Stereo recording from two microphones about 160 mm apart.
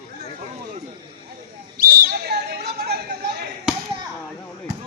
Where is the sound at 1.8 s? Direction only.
70° right (ahead or behind).